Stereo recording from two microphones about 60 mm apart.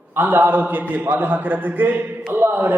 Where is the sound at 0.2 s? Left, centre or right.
Right.